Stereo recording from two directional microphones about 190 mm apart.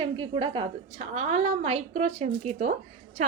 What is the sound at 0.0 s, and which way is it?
Speech, 25° right (ahead or behind).